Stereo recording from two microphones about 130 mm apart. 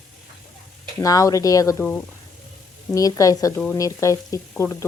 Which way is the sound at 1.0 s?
25° left (ahead or behind).